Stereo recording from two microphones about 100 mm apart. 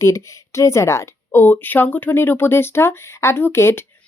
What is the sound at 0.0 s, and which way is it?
Speech, 30° left (ahead or behind).